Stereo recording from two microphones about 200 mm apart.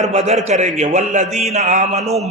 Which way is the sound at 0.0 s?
35° right (ahead or behind).